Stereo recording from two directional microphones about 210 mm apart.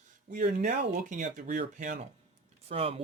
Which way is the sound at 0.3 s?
40° right (ahead or behind).